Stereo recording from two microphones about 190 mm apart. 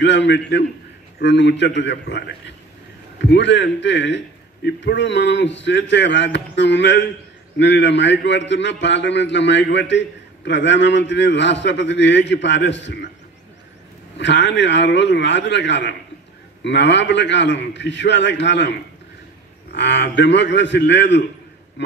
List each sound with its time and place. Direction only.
0.0 s a man's voice: 65° left (ahead or behind)
14.1 s a man's voice: 70° left (ahead or behind)